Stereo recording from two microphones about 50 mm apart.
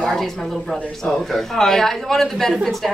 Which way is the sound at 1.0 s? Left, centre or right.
Centre.